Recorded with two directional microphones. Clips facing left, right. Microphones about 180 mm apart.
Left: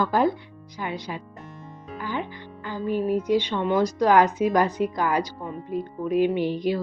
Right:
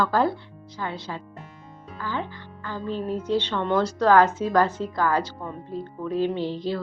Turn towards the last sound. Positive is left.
turn(degrees=15)  # may be behind; listen again after turning